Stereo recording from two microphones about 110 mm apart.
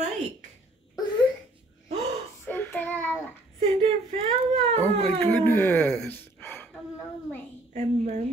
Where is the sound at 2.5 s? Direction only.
20° left (ahead or behind).